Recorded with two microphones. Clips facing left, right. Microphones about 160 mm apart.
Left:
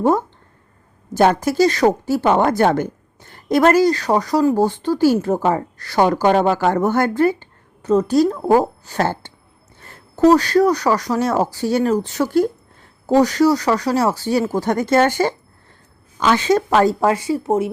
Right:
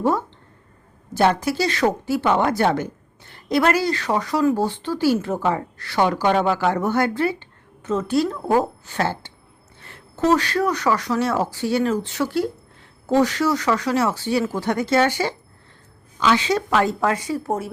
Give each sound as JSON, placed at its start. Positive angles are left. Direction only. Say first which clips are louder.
{"t": 1.1, "sound": "a woman's voice", "louder": "left 4 dB", "side_deg": 45}